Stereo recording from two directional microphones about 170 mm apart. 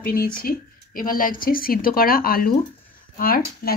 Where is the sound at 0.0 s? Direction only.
60° left (ahead or behind).